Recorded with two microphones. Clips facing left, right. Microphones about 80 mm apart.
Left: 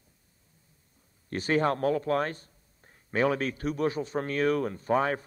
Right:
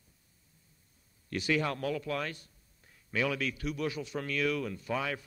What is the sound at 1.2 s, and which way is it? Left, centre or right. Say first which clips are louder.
A man's voice: left 5 dB; left.